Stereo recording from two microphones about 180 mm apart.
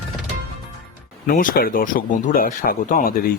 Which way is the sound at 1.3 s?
50° left (ahead or behind).